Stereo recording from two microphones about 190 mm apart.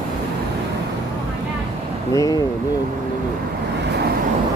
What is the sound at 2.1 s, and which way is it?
Speech, 15° left (ahead or behind).